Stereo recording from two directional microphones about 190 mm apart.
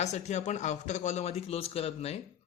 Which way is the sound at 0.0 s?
35° left (ahead or behind).